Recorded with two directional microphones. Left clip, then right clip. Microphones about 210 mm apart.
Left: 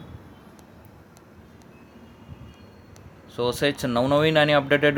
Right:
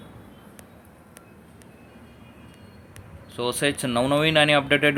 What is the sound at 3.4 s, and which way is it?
Speech, 5° left (ahead or behind).